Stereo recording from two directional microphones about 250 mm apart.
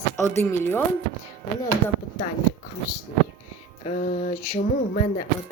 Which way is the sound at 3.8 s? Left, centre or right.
Left.